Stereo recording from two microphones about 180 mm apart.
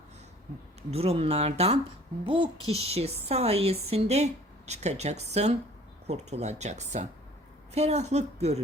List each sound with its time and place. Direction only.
0.9 s a child's voice: 35° right (ahead or behind)